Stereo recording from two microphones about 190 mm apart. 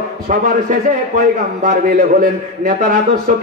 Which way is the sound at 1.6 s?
45° right (ahead or behind).